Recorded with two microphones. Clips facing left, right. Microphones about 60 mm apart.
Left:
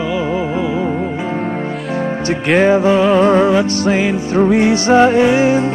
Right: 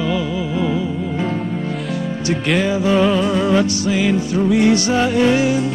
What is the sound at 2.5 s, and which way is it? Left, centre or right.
Music, left.